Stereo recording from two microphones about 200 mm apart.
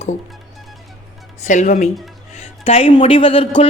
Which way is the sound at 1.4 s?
40° left (ahead or behind).